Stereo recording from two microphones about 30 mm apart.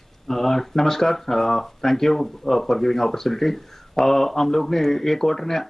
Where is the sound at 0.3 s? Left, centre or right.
Centre.